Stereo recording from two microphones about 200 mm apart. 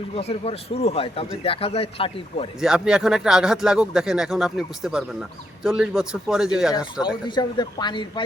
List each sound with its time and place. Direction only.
0.2 s a man's voice: 30° left (ahead or behind)
2.6 s speech: 5° right (ahead or behind)
7.3 s a man's voice: 20° left (ahead or behind)